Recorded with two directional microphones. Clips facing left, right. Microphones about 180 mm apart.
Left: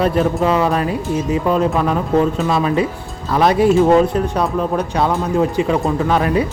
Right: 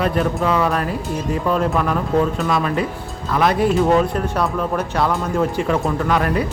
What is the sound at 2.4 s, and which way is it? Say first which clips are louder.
Speech: left 3 dB; 25° left (ahead or behind).